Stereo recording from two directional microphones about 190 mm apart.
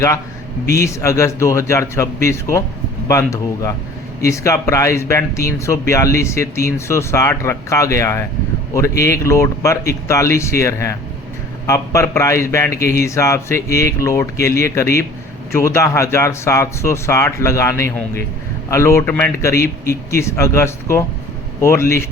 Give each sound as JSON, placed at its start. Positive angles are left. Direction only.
{"t": 0.8, "sound": "speech", "side_deg": 15}